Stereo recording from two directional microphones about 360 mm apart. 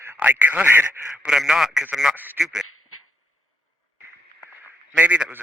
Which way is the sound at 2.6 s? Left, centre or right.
Left.